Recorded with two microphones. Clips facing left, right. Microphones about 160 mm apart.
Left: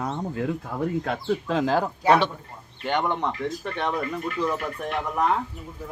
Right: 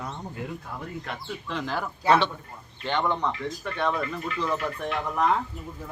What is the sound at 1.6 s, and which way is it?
Speech, 40° left (ahead or behind).